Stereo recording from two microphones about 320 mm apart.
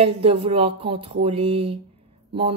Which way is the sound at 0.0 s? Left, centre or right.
Centre.